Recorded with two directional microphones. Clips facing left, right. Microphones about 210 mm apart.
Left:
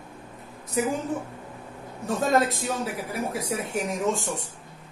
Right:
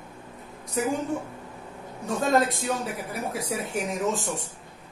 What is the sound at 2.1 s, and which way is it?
A woman's voice, centre (ahead or behind).